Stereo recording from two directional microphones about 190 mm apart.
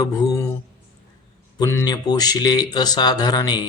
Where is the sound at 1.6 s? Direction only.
15° left (ahead or behind).